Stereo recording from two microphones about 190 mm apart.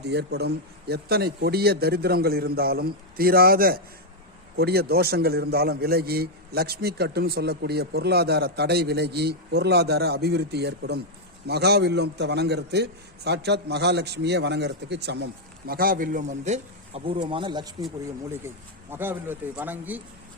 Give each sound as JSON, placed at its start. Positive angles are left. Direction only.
{"t": 0.0, "sound": "a man's voice", "side_deg": -60}